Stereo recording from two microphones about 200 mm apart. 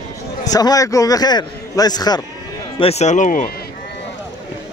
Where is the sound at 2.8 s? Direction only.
30° left (ahead or behind).